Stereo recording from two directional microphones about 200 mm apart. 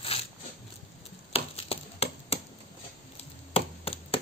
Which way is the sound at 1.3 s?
30° left (ahead or behind).